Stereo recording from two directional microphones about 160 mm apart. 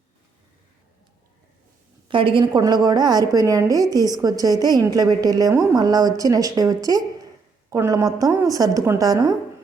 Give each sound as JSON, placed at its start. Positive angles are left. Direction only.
{"t": 2.0, "sound": "a woman's voice", "side_deg": -30}